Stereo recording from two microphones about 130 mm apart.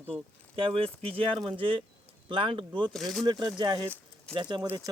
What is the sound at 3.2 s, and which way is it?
Speech, 35° right (ahead or behind).